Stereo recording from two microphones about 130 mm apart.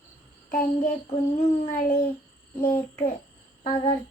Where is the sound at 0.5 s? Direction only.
90° left.